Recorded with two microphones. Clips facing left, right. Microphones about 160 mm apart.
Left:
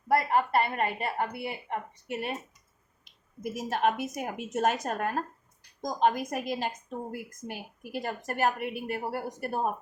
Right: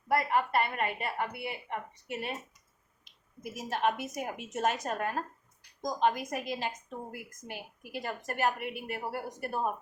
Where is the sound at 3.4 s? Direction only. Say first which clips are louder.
Left 3 dB; 45° left (ahead or behind).